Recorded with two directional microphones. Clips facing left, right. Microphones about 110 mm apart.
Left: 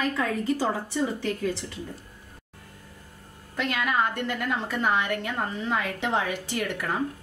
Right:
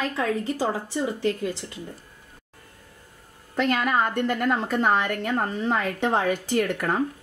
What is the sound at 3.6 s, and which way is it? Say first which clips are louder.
A woman's voice: right 3 dB; 45° right (ahead or behind).